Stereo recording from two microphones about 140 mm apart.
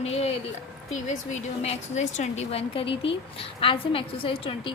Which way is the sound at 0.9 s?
55° left (ahead or behind).